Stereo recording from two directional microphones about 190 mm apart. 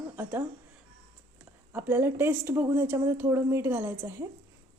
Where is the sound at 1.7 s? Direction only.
10° right (ahead or behind).